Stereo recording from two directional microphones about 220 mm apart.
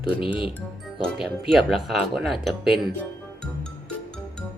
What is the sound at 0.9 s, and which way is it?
Speech, centre (ahead or behind).